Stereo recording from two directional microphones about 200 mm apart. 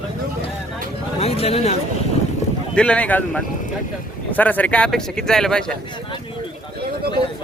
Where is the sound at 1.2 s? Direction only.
30° left (ahead or behind).